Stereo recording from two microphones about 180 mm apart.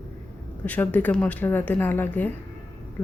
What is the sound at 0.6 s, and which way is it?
A woman's voice, 10° left (ahead or behind).